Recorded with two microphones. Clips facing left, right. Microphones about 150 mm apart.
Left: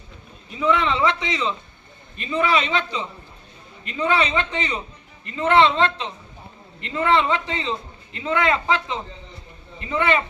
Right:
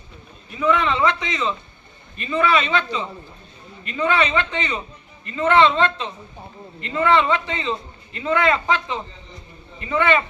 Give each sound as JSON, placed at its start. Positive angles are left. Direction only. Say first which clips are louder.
{"t": 0.5, "sound": "a man's voice", "louder": "right 1 dB", "side_deg": 20}